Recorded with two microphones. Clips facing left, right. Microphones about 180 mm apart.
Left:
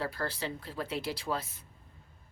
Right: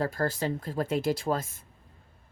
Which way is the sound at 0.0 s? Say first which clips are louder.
Right 7 dB; 45° right (ahead or behind).